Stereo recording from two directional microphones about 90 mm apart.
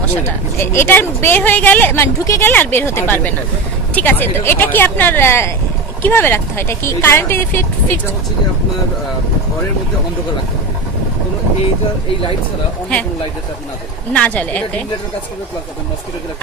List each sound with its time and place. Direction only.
0.3 s a woman's voice: 25° left (ahead or behind)
14.1 s speech: 15° left (ahead or behind)